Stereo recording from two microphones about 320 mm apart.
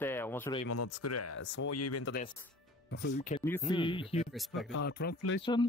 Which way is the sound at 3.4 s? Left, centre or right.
Centre.